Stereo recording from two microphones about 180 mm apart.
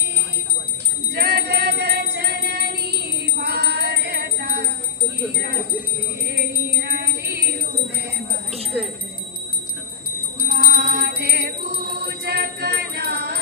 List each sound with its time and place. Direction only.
1.1 s music: 65° right (ahead or behind)
6.3 s music: 65° right (ahead or behind)
10.4 s music: 55° right (ahead or behind)